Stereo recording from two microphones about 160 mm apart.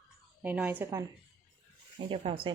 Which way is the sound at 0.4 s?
10° right (ahead or behind).